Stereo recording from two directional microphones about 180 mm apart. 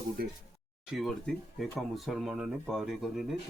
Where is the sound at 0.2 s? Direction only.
55° right (ahead or behind).